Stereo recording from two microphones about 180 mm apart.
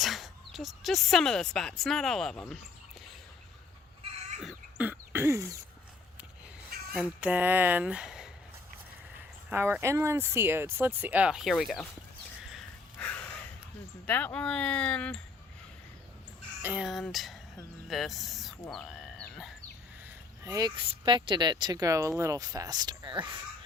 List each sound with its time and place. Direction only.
0.0 s speech: centre (ahead or behind)
4.0 s a sound: 35° right (ahead or behind)
4.4 s throat clearing: 5° right (ahead or behind)
6.9 s speech: 5° right (ahead or behind)
9.5 s speech: 10° right (ahead or behind)
12.5 s a sound: 5° left (ahead or behind)
14.1 s speech: 10° left (ahead or behind)
16.6 s speech: 5° right (ahead or behind)
18.7 s crow: 5° left (ahead or behind)
20.4 s speech: 20° right (ahead or behind)